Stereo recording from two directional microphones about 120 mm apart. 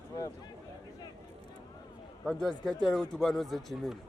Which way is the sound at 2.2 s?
5° left (ahead or behind).